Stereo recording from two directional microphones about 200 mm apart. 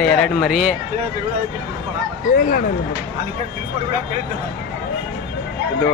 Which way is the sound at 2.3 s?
45° left (ahead or behind).